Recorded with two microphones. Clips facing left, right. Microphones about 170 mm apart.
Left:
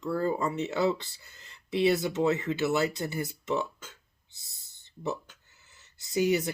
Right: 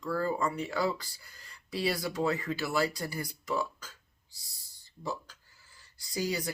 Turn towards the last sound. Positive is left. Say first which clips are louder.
# left 7 dB
turn(degrees=20)  # may be behind; listen again after turning